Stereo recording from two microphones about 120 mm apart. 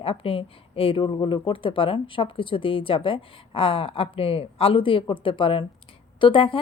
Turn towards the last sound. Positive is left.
turn(degrees=45)  # may be behind; listen again after turning